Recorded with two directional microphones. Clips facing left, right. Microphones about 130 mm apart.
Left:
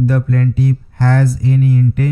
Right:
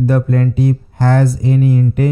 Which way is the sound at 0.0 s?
20° right (ahead or behind).